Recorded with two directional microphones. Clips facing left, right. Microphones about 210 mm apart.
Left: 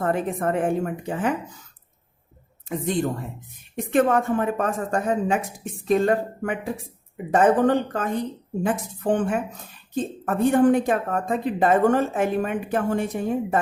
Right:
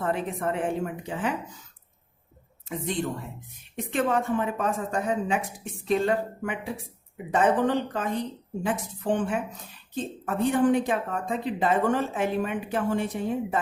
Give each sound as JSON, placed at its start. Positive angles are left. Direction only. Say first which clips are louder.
{"t": 0.0, "sound": "speech", "louder": "left 4 dB", "side_deg": 45}
{"t": 2.6, "sound": "speech", "louder": "left 5 dB", "side_deg": 45}